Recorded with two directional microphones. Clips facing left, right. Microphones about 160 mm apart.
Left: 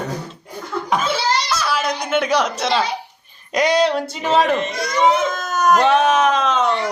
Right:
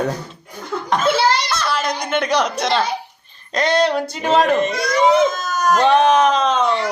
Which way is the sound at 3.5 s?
15° left (ahead or behind).